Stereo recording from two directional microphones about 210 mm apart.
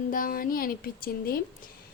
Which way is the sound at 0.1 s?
40° left (ahead or behind).